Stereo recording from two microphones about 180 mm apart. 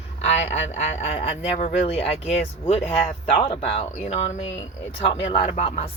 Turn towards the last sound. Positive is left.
turn(degrees=35)  # may be behind; listen again after turning